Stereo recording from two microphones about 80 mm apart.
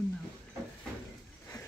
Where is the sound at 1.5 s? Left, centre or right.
Left.